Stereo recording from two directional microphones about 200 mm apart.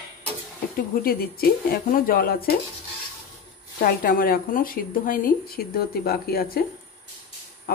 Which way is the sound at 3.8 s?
50° left (ahead or behind).